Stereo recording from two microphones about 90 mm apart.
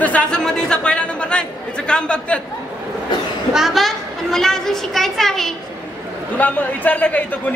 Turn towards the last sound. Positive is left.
turn(degrees=20)  # may be behind; listen again after turning